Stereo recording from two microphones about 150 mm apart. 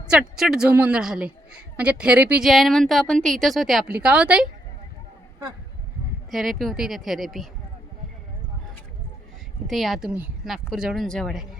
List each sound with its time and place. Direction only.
0.1 s a woman's voice: centre (ahead or behind)
6.3 s a woman's voice: centre (ahead or behind)
9.6 s a woman's voice: centre (ahead or behind)